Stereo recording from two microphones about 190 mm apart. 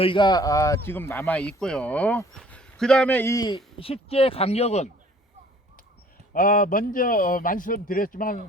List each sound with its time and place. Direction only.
0.0 s speech: 25° left (ahead or behind)
6.3 s a man's voice: 45° left (ahead or behind)